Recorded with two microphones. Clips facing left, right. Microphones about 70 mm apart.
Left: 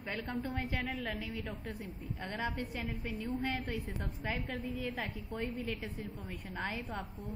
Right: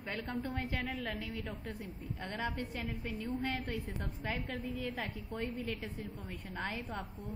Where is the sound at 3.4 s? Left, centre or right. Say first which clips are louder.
Left 1 dB; centre.